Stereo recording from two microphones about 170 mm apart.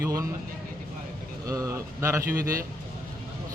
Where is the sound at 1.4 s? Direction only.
20° right (ahead or behind).